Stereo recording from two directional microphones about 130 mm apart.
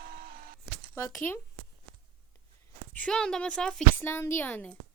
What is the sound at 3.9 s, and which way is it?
Speech, 20° left (ahead or behind).